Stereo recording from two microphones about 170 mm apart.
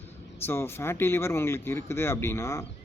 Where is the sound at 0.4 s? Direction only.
15° left (ahead or behind).